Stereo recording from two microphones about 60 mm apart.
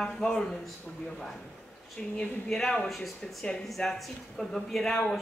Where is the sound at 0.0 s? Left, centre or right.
Centre.